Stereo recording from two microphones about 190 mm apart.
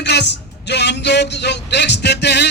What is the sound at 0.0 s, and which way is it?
Speech, 65° left (ahead or behind).